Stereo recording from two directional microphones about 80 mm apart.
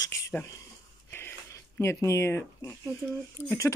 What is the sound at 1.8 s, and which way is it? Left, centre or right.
Speech, left.